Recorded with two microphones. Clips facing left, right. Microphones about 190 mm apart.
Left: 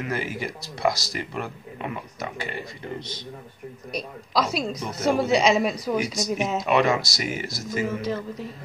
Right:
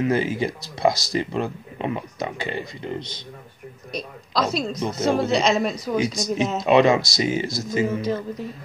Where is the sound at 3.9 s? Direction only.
10° left (ahead or behind).